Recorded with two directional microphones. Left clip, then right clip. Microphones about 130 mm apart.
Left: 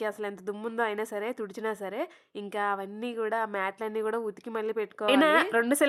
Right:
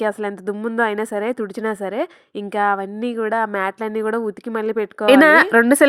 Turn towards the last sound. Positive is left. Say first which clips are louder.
# right 12 dB
turn(degrees=-40)  # may be behind; listen again after turning